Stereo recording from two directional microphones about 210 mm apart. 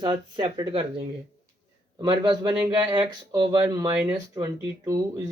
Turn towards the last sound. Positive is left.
turn(degrees=-15)  # may be behind; listen again after turning